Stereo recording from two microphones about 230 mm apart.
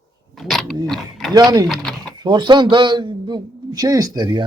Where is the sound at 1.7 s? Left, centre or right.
Centre.